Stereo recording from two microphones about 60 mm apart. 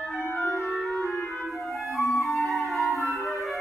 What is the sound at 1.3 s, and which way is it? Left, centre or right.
Music, centre.